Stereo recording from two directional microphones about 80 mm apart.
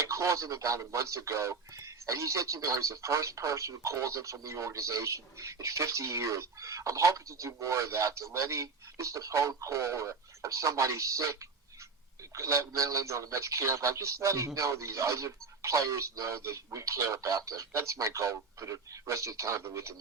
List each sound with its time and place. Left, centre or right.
0.0 s speech: right